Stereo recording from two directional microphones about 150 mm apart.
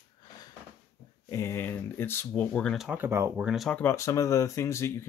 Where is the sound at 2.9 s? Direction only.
15° right (ahead or behind).